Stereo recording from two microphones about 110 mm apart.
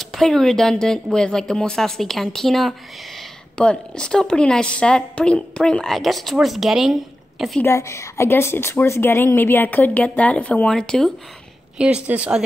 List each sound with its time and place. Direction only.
0.0 s a woman's voice: centre (ahead or behind)
7.6 s a woman's voice: 25° left (ahead or behind); by 11.1 s 5° left (ahead or behind)
11.8 s speech: 10° right (ahead or behind)